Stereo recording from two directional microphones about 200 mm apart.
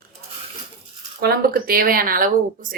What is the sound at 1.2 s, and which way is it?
Speech, 50° right (ahead or behind).